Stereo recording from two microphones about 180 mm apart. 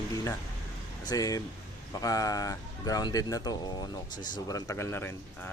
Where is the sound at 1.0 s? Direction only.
20° left (ahead or behind).